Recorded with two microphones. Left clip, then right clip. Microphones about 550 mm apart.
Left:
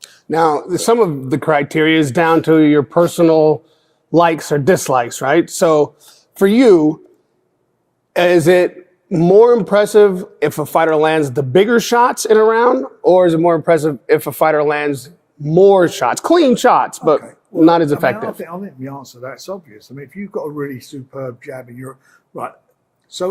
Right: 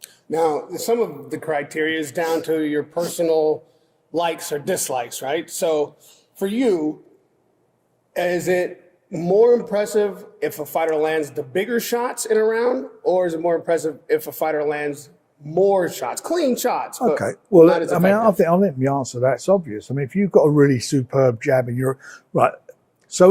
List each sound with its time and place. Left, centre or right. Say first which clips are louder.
0.0 s a man's voice: left 6 dB; left
8.1 s a man's voice: left 9 dB; left
18.3 s speech: right 11 dB; right